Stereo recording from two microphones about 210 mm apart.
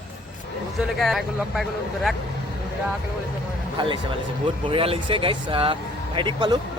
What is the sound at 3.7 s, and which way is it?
Speech, 20° right (ahead or behind).